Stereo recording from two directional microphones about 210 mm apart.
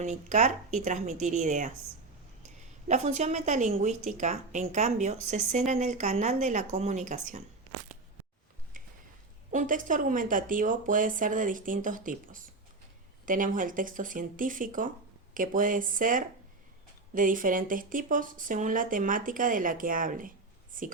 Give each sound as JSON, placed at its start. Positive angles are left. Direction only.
{"t": 0.0, "sound": "speech", "side_deg": -35}
{"t": 2.8, "sound": "a woman's voice", "side_deg": -35}
{"t": 9.5, "sound": "speech", "side_deg": -40}